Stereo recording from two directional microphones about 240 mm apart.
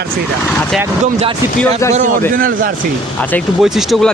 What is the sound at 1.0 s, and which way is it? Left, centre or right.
Speech, right.